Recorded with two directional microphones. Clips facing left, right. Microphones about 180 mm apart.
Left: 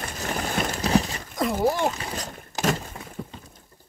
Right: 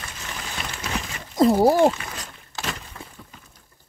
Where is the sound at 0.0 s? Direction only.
45° left (ahead or behind).